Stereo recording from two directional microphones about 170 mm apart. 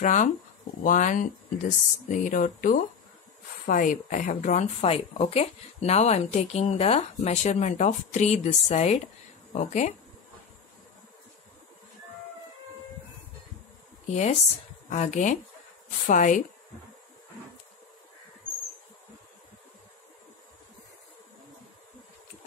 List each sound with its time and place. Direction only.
0.0 s speech: 45° left (ahead or behind)
14.9 s speech: 45° left (ahead or behind)